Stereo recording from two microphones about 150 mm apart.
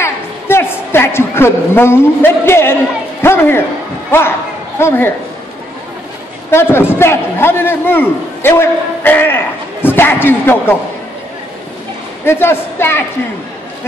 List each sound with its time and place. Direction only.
0.0 s a sound: 15° left (ahead or behind)
4.7 s a man's voice: 15° left (ahead or behind)
6.5 s a man's voice: 15° left (ahead or behind)
12.3 s a man's voice: 15° left (ahead or behind)